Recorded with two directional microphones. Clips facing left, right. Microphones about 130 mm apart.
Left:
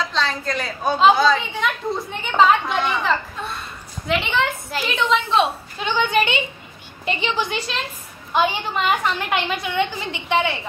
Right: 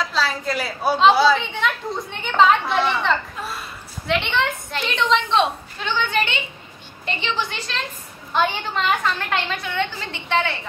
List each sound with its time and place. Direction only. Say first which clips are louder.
0.1 s a woman's voice: even; 5° right (ahead or behind)
5.8 s a woman's voice: left 3 dB; 15° left (ahead or behind)